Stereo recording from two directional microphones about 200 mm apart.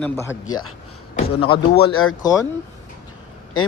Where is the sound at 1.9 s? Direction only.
90° left.